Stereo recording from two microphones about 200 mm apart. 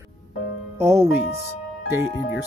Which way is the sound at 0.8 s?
15° right (ahead or behind).